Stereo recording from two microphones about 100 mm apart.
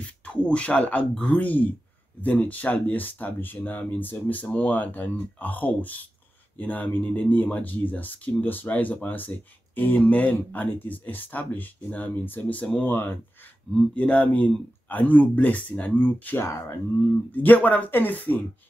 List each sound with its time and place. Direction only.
0.0 s speech: 10° left (ahead or behind)
16.4 s speech: 30° left (ahead or behind)
17.3 s speech: 15° left (ahead or behind)